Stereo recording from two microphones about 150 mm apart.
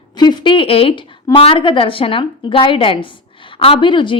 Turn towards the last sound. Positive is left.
turn(degrees=30)  # may be behind; listen again after turning